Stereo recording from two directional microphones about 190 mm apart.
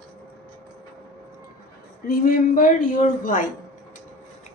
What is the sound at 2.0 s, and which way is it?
A woman's voice, 45° left (ahead or behind).